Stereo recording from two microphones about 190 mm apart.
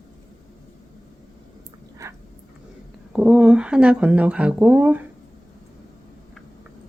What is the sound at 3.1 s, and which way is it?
Speech, 5° right (ahead or behind).